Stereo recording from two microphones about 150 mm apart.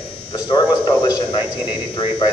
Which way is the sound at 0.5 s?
25° left (ahead or behind).